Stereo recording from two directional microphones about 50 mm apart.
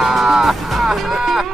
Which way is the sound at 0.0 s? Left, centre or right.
Centre.